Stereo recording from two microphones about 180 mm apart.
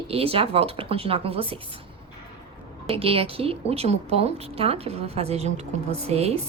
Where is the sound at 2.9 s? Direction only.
30° right (ahead or behind).